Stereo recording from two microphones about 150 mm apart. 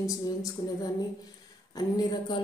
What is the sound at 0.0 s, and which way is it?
A woman's voice, 25° left (ahead or behind).